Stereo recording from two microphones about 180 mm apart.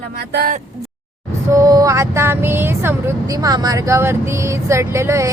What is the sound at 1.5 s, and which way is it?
Speech, 20° right (ahead or behind).